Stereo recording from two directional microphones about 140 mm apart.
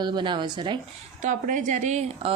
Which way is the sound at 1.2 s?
65° right (ahead or behind).